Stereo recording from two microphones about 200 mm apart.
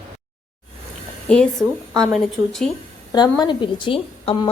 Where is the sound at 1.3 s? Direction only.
5° left (ahead or behind).